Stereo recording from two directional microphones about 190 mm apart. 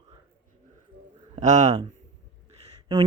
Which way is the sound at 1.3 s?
40° right (ahead or behind).